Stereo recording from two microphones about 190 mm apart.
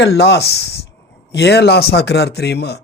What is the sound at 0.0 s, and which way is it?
Speech, 60° left (ahead or behind).